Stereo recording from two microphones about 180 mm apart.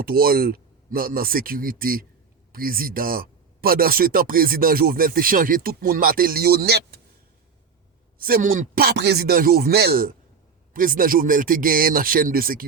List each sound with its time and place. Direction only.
0.0 s speech: 55° right (ahead or behind)
8.2 s speech: 50° right (ahead or behind)